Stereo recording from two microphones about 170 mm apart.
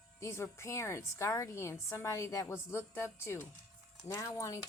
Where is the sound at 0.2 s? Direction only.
15° left (ahead or behind).